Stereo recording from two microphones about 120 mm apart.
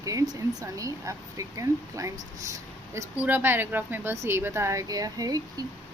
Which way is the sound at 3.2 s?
15° right (ahead or behind).